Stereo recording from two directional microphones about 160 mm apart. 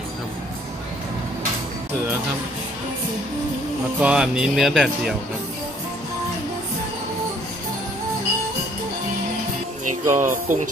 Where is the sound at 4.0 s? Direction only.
5° right (ahead or behind).